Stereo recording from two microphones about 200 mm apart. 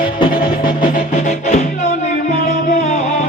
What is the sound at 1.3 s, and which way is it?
Music, 35° left (ahead or behind).